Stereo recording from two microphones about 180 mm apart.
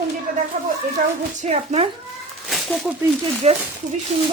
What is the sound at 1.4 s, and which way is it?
Speech, 35° right (ahead or behind).